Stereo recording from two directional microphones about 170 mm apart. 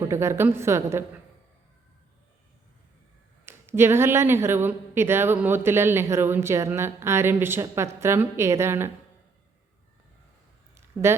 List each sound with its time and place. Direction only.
0.1 s speech: 15° right (ahead or behind)
3.4 s speech: 15° right (ahead or behind)
11.0 s speech: 15° right (ahead or behind)